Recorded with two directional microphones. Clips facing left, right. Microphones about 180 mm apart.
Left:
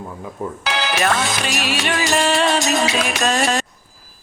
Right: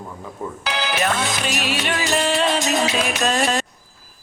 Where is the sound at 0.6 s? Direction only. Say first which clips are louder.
Left 2 dB; 85° left.